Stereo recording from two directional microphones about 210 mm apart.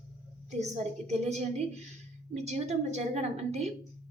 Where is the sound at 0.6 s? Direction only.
30° right (ahead or behind).